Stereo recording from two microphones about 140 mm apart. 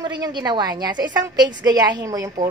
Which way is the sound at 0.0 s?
30° right (ahead or behind).